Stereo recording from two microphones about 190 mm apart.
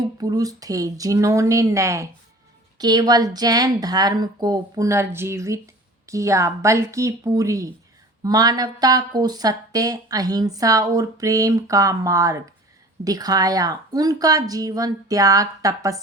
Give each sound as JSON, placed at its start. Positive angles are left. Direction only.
{"t": 0.2, "sound": "speech", "side_deg": -20}